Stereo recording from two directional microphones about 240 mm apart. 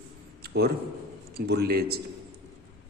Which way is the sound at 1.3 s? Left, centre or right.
Right.